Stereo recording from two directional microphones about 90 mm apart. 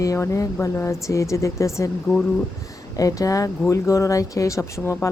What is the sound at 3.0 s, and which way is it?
A woman's voice, 40° left (ahead or behind).